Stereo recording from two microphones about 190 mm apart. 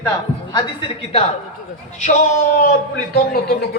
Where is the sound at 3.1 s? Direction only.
55° left (ahead or behind).